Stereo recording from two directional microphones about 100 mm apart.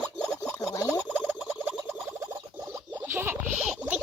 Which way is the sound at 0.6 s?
35° left (ahead or behind).